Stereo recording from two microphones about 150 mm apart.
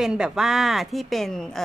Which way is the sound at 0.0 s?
5° right (ahead or behind).